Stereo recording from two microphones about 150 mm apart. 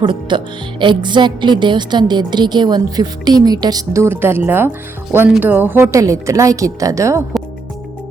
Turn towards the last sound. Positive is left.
turn(degrees=-20)  # may be behind; listen again after turning